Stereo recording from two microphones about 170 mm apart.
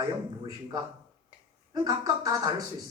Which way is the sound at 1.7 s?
20° right (ahead or behind).